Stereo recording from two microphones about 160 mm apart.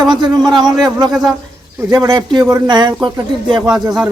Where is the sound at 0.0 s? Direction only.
25° right (ahead or behind).